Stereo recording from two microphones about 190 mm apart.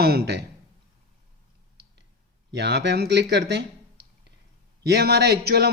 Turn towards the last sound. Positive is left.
turn(degrees=-55)  # may be behind; listen again after turning